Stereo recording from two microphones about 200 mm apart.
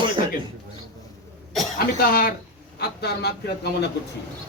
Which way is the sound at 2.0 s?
45° left (ahead or behind).